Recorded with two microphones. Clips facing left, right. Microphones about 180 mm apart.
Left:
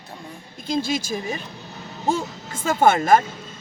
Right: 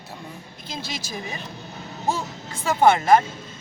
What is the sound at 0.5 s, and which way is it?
Speech, 45° left (ahead or behind).